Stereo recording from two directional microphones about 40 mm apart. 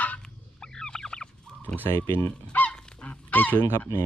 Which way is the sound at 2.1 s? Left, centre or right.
Right.